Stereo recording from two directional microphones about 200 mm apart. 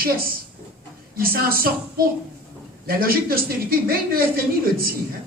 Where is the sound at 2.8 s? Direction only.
45° right (ahead or behind).